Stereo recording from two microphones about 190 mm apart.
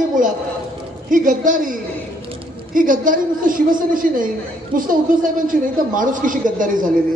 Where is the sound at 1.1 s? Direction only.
45° right (ahead or behind).